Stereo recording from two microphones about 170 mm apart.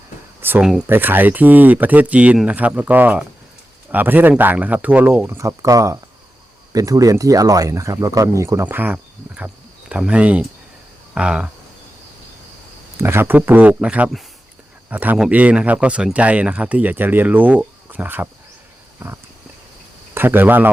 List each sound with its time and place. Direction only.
0.4 s speech: 10° right (ahead or behind)
11.1 s cricket: 5° right (ahead or behind)
13.0 s speech: 15° right (ahead or behind)
18.9 s wild animals: 15° right (ahead or behind)
20.1 s speech: 10° right (ahead or behind)